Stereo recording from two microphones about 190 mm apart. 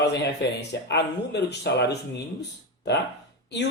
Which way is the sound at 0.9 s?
60° left (ahead or behind).